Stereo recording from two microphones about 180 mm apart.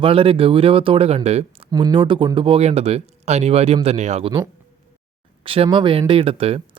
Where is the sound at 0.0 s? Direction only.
30° right (ahead or behind).